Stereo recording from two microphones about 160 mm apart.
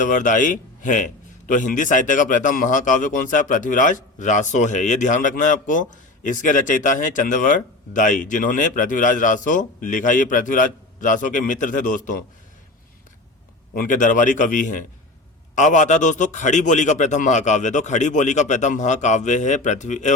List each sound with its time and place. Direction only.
0.0 s a man's voice: 55° left (ahead or behind)
13.7 s a man's voice: 55° left (ahead or behind)